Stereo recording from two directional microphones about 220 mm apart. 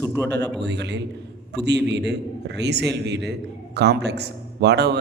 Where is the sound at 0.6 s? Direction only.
50° right (ahead or behind).